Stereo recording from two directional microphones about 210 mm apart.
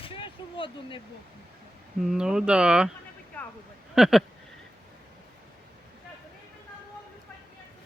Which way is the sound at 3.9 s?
Centre (ahead or behind).